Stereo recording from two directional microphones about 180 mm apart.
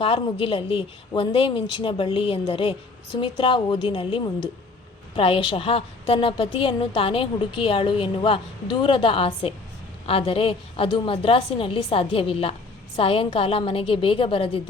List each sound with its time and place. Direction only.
0.0 s a woman's voice: 30° left (ahead or behind)